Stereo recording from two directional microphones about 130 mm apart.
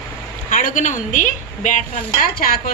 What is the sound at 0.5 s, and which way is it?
A woman's voice, 85° left.